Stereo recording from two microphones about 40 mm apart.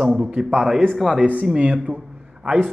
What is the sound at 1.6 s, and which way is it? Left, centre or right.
Speech, right.